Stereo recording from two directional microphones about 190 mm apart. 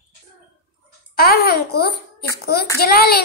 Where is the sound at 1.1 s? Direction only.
55° left (ahead or behind).